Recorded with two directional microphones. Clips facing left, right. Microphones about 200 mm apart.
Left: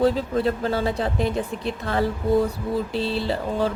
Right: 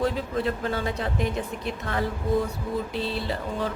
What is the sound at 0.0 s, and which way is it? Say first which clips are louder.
A woman's voice: left 5 dB; 35° left (ahead or behind).